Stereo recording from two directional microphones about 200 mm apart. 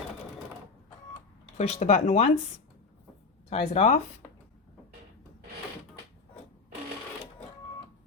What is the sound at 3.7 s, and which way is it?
Speech, 35° left (ahead or behind).